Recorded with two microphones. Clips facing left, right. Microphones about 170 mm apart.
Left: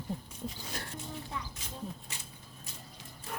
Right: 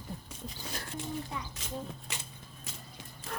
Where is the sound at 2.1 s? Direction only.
90° right.